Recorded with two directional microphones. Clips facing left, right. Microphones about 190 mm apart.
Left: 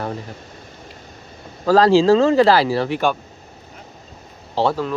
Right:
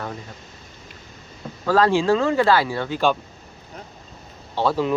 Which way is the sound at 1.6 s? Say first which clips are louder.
Left 5 dB; 35° left (ahead or behind).